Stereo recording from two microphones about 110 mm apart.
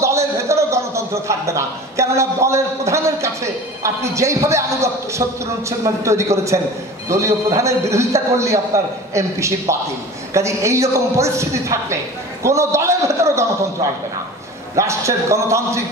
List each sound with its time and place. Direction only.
0.0 s a man's voice: 25° right (ahead or behind)